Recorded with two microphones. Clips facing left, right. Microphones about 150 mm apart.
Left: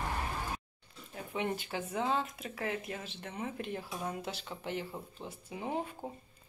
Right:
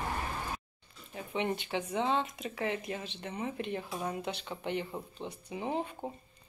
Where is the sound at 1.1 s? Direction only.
Centre (ahead or behind).